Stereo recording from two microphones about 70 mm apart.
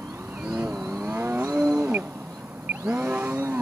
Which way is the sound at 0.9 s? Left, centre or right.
Right.